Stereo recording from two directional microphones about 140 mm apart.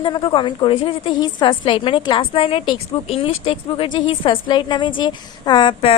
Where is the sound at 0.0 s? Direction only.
35° left (ahead or behind).